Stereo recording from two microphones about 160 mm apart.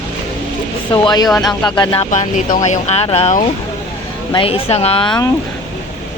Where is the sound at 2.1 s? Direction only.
50° left (ahead or behind); by 5.3 s 25° left (ahead or behind).